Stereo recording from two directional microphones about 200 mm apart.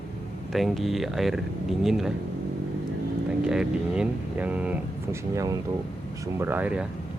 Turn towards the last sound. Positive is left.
turn(degrees=-5)  # may be behind; listen again after turning